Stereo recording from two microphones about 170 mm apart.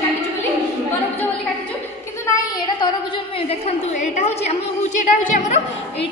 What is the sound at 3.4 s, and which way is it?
A woman's voice, 35° left (ahead or behind).